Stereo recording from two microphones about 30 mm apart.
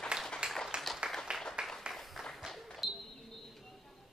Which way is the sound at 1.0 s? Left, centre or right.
Centre.